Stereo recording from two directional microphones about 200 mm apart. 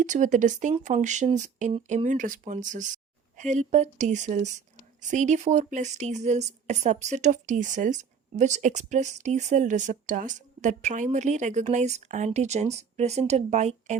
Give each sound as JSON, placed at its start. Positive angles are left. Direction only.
{"t": 0.0, "sound": "speech", "side_deg": -40}